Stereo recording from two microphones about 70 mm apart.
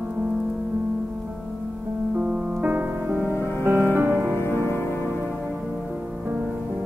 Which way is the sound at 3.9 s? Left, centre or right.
Right.